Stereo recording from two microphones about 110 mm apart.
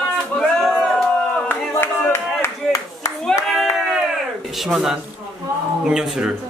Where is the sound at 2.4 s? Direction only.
30° left (ahead or behind).